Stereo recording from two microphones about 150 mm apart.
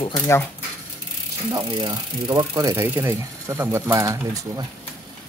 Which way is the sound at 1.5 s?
25° right (ahead or behind).